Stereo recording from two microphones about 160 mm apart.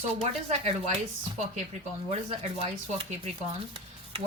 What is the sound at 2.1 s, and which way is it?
Speech, 40° right (ahead or behind).